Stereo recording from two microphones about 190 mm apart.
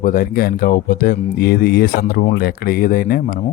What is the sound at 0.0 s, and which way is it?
Speech, 45° left (ahead or behind).